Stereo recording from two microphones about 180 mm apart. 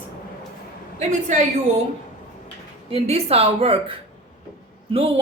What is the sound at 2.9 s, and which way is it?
Speech, 35° right (ahead or behind).